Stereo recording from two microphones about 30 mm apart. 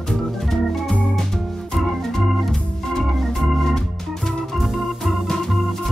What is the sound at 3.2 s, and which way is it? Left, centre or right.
Organ, centre.